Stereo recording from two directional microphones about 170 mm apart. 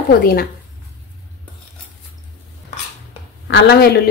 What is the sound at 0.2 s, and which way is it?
Speech, 65° left (ahead or behind).